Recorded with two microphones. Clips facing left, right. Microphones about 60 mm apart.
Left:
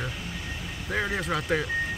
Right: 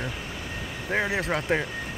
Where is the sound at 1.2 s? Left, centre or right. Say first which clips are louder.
Right 1 dB; right.